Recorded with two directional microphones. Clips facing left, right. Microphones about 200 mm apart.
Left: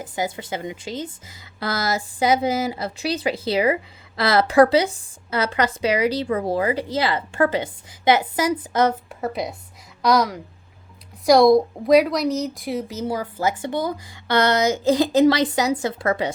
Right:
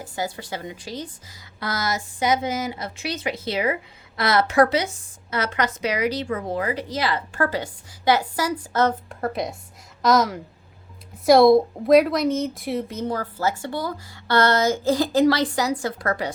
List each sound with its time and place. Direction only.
0.0 s a woman's voice: 20° left (ahead or behind)